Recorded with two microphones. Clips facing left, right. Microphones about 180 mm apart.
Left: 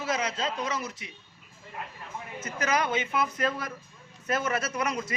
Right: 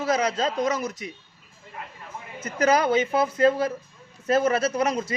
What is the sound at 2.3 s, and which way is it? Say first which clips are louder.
Speech: right 7 dB; 35° right (ahead or behind).